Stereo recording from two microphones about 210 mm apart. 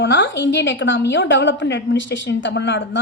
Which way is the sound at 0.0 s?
60° left (ahead or behind).